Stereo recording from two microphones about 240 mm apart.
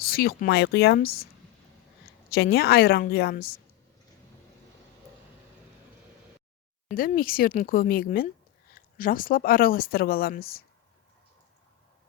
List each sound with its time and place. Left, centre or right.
0.0 s speech: left
2.3 s speech: left
6.9 s speech: left